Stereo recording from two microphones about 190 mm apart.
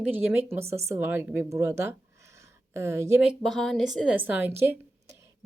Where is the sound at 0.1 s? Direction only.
10° right (ahead or behind).